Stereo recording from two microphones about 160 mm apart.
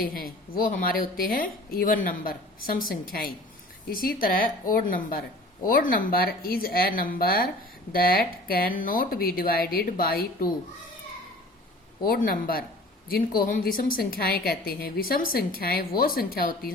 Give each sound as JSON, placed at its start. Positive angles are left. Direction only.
{"t": 0.0, "sound": "a woman's voice", "side_deg": 65}
{"t": 12.0, "sound": "a woman's voice", "side_deg": 65}